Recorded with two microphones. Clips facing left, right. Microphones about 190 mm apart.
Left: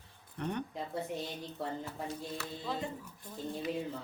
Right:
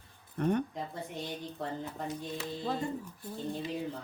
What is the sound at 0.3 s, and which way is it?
Speech, 50° right (ahead or behind).